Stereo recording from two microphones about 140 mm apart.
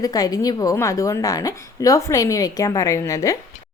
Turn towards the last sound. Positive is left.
turn(degrees=20)  # may be behind; listen again after turning